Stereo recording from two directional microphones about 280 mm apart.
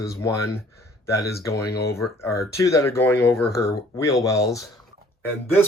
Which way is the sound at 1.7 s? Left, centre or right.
Left.